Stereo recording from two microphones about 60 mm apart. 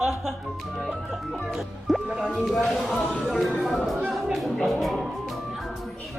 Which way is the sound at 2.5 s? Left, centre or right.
Centre.